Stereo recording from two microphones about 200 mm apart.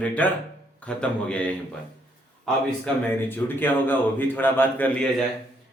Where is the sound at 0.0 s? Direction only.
5° left (ahead or behind).